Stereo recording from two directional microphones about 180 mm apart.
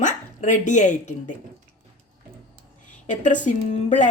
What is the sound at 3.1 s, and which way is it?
Speech, 45° left (ahead or behind).